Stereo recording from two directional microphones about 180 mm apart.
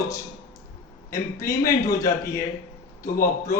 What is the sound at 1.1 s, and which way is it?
A man's voice, 15° left (ahead or behind).